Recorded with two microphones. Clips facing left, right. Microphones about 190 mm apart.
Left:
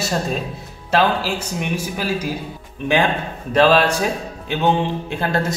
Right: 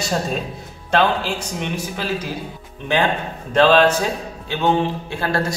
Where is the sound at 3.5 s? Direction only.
10° left (ahead or behind).